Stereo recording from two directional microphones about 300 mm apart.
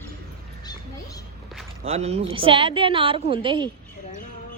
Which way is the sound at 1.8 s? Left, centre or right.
Centre.